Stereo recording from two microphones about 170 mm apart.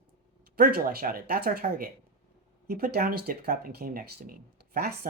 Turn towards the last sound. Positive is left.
turn(degrees=-65)  # may be behind; listen again after turning